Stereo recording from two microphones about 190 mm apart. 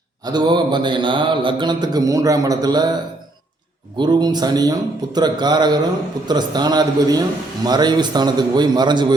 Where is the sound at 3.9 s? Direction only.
25° right (ahead or behind).